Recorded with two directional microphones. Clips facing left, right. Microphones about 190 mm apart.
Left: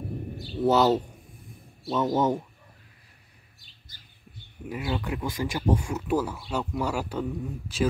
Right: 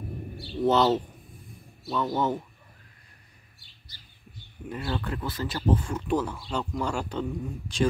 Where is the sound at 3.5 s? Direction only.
50° left (ahead or behind).